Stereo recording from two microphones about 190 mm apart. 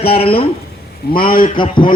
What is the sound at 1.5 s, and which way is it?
Speech, 25° left (ahead or behind).